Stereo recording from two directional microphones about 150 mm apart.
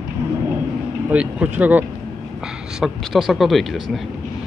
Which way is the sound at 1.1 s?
10° right (ahead or behind).